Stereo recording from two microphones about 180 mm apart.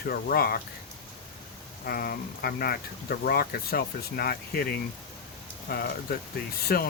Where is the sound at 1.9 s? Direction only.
60° left (ahead or behind).